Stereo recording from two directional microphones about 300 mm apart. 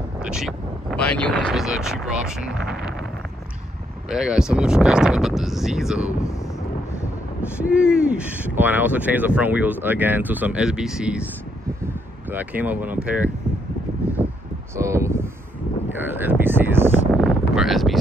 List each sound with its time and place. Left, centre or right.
0.2 s speech: centre
4.1 s speech: centre
7.7 s speech: centre
12.3 s speech: centre
14.8 s speech: centre
17.1 s a sound: centre